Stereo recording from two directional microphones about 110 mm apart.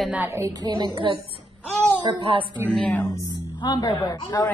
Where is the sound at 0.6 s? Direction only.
45° right (ahead or behind).